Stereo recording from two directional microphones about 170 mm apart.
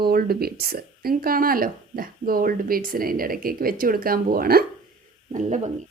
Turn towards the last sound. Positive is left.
turn(degrees=-45)  # may be behind; listen again after turning